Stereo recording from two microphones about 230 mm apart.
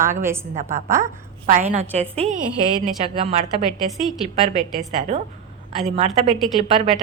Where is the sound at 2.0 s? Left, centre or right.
Right.